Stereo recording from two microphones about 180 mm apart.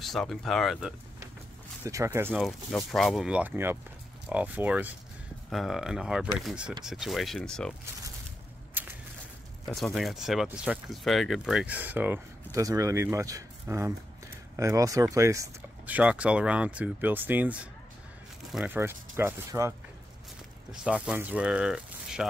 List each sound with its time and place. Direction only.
0.0 s speech: centre (ahead or behind)
1.9 s speech: 15° right (ahead or behind)
2.3 s speech: centre (ahead or behind)
9.7 s speech: 5° left (ahead or behind); by 16.0 s 15° right (ahead or behind)
16.0 s speech: 5° right (ahead or behind)
20.8 s speech: 5° right (ahead or behind)